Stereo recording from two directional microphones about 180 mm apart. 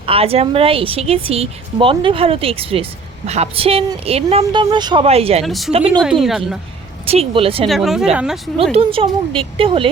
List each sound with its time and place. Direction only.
0.0 s a woman's voice: 30° right (ahead or behind)
5.4 s a woman's voice: centre (ahead or behind)
5.7 s a woman's voice: 35° right (ahead or behind)
6.0 s a woman's voice: centre (ahead or behind)
7.0 s a woman's voice: 35° right (ahead or behind)
7.7 s a woman's voice: centre (ahead or behind)
8.7 s a woman's voice: 30° right (ahead or behind)